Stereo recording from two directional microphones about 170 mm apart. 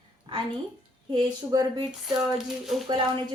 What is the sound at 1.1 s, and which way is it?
Speech, 25° right (ahead or behind).